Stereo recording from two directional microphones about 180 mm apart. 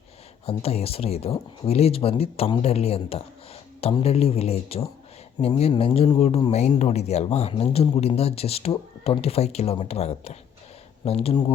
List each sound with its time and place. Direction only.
0.4 s speech: 35° left (ahead or behind)